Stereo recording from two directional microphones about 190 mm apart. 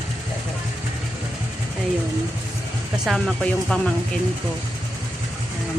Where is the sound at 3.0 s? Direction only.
Centre (ahead or behind).